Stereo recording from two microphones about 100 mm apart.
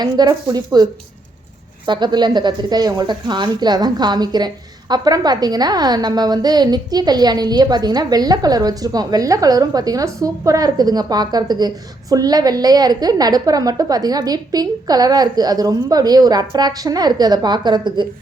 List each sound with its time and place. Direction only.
0.0 s speech: 40° right (ahead or behind)
1.9 s a woman's voice: 45° right (ahead or behind)